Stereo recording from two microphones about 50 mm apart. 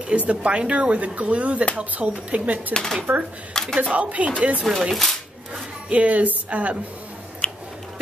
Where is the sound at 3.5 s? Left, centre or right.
Centre.